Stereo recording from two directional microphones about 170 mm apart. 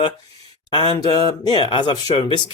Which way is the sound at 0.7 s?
25° left (ahead or behind).